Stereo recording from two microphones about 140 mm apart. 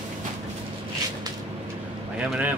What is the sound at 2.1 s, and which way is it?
Speech, 10° right (ahead or behind).